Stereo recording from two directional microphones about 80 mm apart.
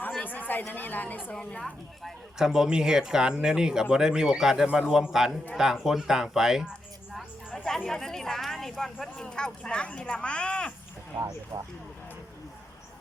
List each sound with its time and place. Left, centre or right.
0.2 s a sound: left
0.7 s a woman's voice: left
2.0 s speech: centre
7.2 s a sound: centre
7.9 s speech: centre
11.5 s speech: right